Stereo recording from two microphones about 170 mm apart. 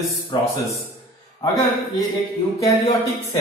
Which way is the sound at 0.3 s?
30° left (ahead or behind).